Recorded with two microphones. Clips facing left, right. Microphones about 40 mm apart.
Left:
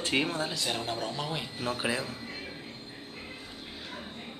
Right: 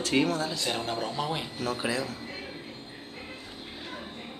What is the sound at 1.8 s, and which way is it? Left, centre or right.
Speech, centre.